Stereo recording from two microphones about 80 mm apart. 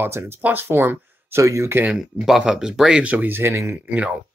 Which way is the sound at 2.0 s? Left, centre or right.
Centre.